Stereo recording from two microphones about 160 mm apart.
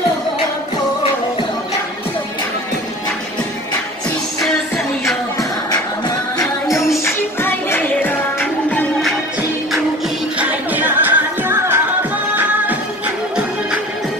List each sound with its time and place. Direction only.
4.4 s music: centre (ahead or behind)
5.7 s music: 25° left (ahead or behind)
7.3 s music: 15° left (ahead or behind)
10.4 s music: 10° right (ahead or behind)